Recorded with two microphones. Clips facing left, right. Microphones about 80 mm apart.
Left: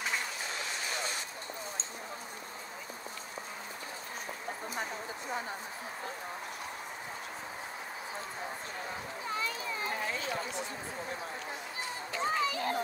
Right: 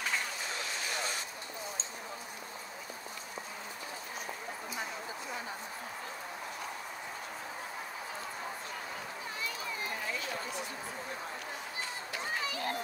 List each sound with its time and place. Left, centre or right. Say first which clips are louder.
12.2 s children playing: left 6 dB; left